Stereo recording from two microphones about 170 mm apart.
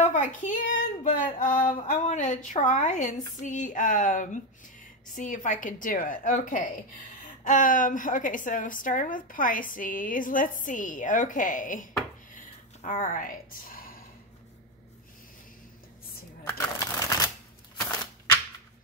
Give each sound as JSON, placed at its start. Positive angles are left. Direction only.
{"t": 0.0, "sound": "a woman's voice", "side_deg": 45}
{"t": 16.4, "sound": "shuffling cards", "side_deg": 15}
{"t": 17.7, "sound": "typewriter", "side_deg": 20}